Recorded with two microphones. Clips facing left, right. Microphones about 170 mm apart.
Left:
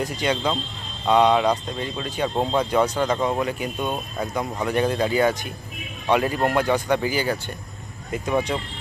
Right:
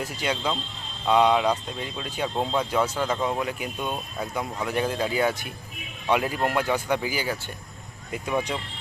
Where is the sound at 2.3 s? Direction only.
10° left (ahead or behind).